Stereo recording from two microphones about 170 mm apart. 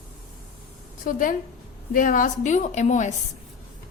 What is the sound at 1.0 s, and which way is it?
A woman's voice, 55° left (ahead or behind).